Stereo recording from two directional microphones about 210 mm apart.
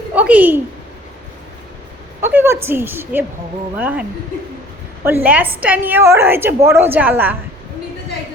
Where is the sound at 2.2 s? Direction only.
10° right (ahead or behind).